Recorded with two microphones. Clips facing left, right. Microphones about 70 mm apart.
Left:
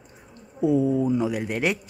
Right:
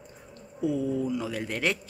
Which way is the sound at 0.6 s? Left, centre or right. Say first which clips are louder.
Left 7 dB; left.